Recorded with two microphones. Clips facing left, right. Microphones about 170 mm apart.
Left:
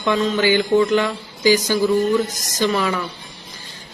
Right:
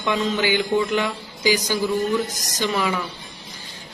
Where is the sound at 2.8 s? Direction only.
5° right (ahead or behind).